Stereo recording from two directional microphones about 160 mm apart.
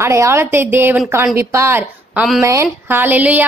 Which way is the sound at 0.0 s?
20° right (ahead or behind).